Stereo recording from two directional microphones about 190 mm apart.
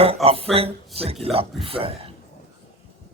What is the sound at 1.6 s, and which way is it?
Speech, 30° right (ahead or behind).